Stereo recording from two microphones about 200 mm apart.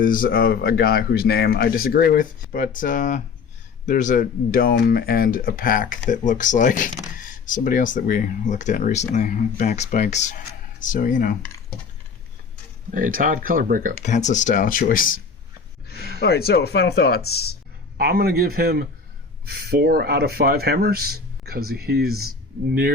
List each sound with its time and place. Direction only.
0.0 s speech: 45° left (ahead or behind)
12.9 s speech: 45° right (ahead or behind)
14.0 s speech: 35° left (ahead or behind)
15.9 s a sound: 55° left (ahead or behind)
16.2 s speech: 50° left (ahead or behind)
17.9 s speech: 50° right (ahead or behind)